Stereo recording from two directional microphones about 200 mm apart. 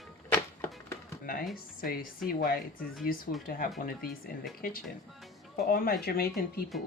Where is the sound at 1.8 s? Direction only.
45° left (ahead or behind).